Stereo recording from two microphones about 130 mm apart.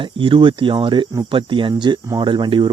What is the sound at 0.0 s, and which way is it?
Speech, 40° right (ahead or behind).